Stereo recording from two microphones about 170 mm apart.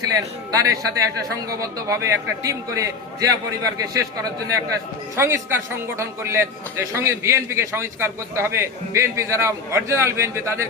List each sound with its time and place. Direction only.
0.0 s a man's voice: 20° right (ahead or behind)